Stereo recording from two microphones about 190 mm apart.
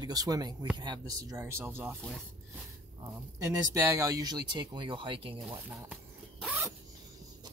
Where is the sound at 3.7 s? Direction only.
15° right (ahead or behind).